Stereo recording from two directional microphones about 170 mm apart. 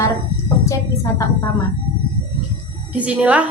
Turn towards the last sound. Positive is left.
turn(degrees=-10)  # may be behind; listen again after turning